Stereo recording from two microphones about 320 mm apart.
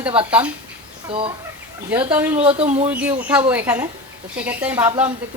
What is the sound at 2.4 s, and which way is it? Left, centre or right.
Speech, centre.